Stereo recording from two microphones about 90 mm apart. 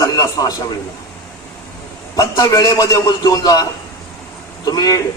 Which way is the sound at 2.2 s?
45° left (ahead or behind).